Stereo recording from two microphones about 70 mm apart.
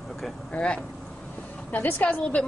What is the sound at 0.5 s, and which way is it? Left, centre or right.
A woman's voice, centre.